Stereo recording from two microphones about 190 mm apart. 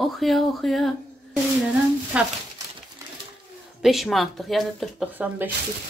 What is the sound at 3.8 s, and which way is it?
Speech, centre (ahead or behind).